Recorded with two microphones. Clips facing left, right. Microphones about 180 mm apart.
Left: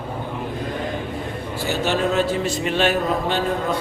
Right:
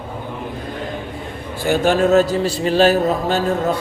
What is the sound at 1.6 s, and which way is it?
Speech, 50° right (ahead or behind).